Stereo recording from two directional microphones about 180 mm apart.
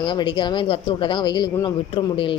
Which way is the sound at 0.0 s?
25° left (ahead or behind).